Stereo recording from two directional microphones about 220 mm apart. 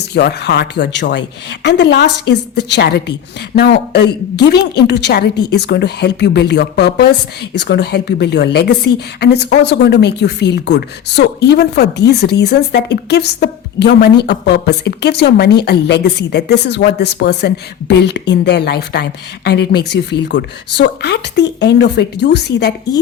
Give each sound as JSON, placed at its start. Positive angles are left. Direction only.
{"t": 0.1, "sound": "a woman's voice", "side_deg": 50}